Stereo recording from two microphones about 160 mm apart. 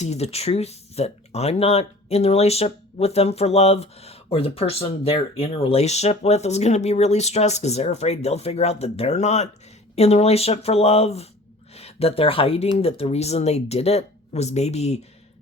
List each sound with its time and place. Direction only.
0.0 s speech: 40° left (ahead or behind)